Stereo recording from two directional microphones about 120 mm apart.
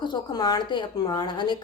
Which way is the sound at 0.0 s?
35° left (ahead or behind).